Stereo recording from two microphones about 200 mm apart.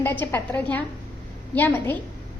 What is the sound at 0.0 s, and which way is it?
A woman's voice, 10° left (ahead or behind).